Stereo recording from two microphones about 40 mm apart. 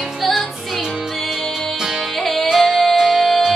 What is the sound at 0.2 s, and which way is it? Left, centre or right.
Music, centre.